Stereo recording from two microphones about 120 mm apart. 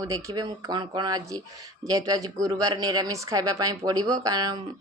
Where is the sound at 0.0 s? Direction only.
30° right (ahead or behind).